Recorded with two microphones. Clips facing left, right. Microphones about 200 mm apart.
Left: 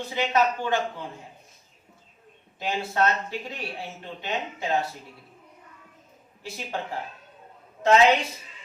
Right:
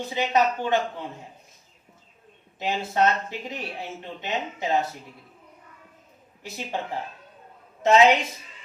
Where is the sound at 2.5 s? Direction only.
20° right (ahead or behind).